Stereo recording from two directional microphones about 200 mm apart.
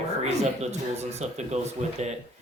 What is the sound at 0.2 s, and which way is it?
Speech, 35° right (ahead or behind).